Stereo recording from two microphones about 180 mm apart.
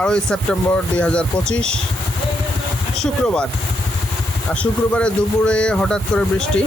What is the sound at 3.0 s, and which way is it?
Speech, 5° left (ahead or behind).